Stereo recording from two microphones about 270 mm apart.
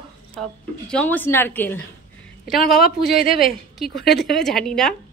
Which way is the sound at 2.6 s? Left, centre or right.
Left.